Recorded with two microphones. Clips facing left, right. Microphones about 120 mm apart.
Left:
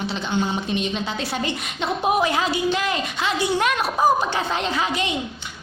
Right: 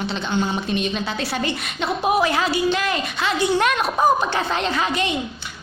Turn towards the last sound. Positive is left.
turn(degrees=15)  # may be behind; listen again after turning